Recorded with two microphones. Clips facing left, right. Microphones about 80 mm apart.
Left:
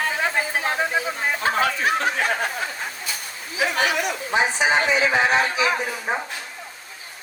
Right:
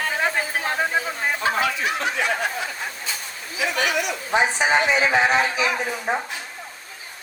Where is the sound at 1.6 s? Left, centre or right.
Left.